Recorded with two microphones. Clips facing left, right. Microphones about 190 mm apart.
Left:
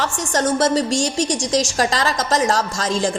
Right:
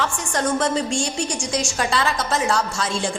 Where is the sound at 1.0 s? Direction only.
90° left.